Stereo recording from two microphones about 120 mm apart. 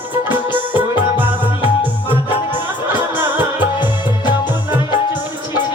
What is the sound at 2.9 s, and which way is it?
Music, 15° right (ahead or behind).